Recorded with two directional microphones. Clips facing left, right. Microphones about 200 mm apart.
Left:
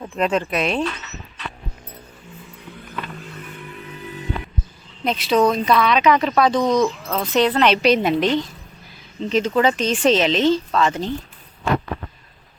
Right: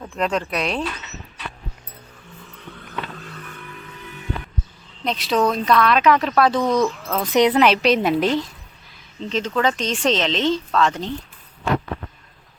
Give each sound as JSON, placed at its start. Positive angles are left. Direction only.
{"t": 0.0, "sound": "speech", "side_deg": 5}
{"t": 3.4, "sound": "vehicle", "side_deg": 20}
{"t": 5.0, "sound": "speech", "side_deg": 0}
{"t": 7.3, "sound": "a woman's voice", "side_deg": -15}
{"t": 7.7, "sound": "speech", "side_deg": 0}
{"t": 9.3, "sound": "speech", "side_deg": 10}